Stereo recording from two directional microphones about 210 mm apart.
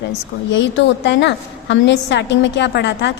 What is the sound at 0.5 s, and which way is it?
A woman's voice, 60° left (ahead or behind).